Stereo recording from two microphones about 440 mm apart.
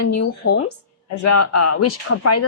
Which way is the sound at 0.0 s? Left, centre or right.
Left.